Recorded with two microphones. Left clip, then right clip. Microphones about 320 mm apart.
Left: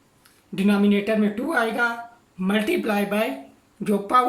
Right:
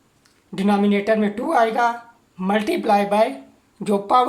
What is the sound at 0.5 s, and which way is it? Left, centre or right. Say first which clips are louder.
Speech: right 2 dB; right.